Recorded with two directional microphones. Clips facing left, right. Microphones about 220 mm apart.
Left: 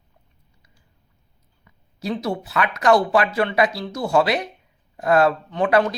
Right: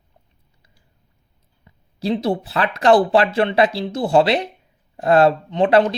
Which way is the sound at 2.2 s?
30° right (ahead or behind).